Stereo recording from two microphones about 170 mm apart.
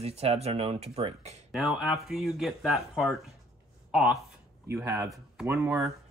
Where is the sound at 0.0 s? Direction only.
40° right (ahead or behind).